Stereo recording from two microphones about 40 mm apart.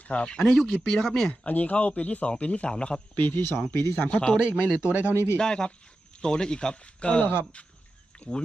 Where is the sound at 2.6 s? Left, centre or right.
Left.